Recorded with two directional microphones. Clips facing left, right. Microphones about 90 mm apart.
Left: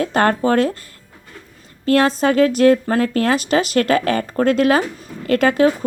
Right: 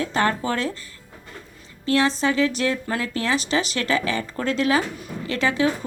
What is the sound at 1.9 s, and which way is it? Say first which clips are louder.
A woman's voice: left 5 dB; 45° left (ahead or behind).